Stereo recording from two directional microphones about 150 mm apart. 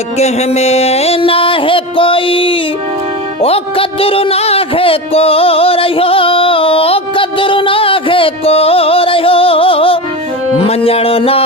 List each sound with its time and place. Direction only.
0.2 s music: 45° left (ahead or behind)